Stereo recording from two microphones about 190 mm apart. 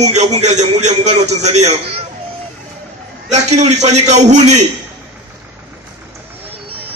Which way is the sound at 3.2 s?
35° right (ahead or behind).